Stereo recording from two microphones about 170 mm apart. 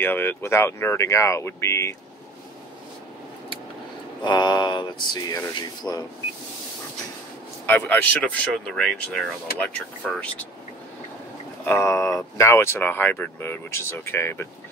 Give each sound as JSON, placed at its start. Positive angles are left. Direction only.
{"t": 0.0, "sound": "speech", "side_deg": 10}
{"t": 4.2, "sound": "speech", "side_deg": 25}
{"t": 7.6, "sound": "speech", "side_deg": 10}
{"t": 11.6, "sound": "speech", "side_deg": 15}